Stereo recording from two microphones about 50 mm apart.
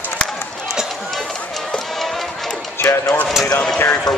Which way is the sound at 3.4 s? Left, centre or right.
Centre.